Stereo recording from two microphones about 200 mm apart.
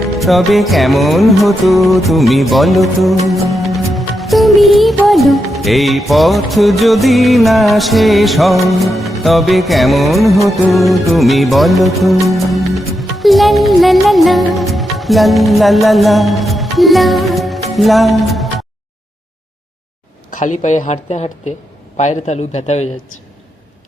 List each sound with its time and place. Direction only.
0.2 s music: centre (ahead or behind)
20.3 s speech: 40° left (ahead or behind)